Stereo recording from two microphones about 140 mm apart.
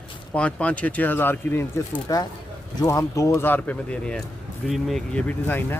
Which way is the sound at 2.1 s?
25° left (ahead or behind).